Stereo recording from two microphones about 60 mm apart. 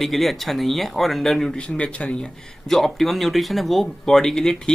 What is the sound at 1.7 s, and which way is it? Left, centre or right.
Speech, centre.